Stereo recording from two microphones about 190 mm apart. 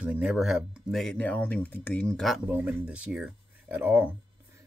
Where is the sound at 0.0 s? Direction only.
5° right (ahead or behind).